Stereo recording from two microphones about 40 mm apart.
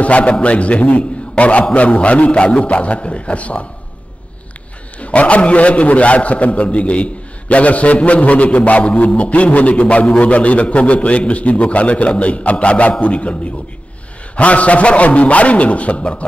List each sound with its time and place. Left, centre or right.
0.0 s a man's voice: left
5.0 s a man's voice: left